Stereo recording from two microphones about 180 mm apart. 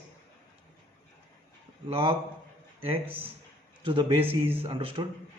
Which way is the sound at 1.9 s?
30° right (ahead or behind).